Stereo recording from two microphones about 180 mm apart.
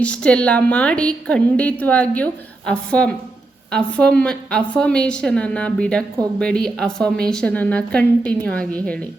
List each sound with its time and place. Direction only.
0.0 s a woman's voice: 5° left (ahead or behind)